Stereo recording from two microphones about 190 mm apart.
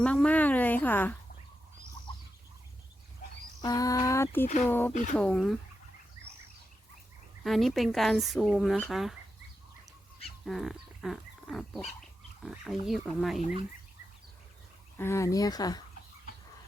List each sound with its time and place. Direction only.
0.0 s a sound: 5° left (ahead or behind)
2.1 s a sound: 25° left (ahead or behind)
3.6 s speech: 20° left (ahead or behind)
4.9 s speech: 40° left (ahead or behind)
5.1 s speech: 5° left (ahead or behind)
7.4 s speech: centre (ahead or behind)
10.4 s a sound: centre (ahead or behind)
12.4 s speech: centre (ahead or behind)
14.9 s speech: 15° left (ahead or behind)